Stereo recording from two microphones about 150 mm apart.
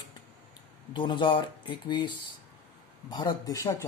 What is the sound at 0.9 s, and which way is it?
Speech, 35° left (ahead or behind).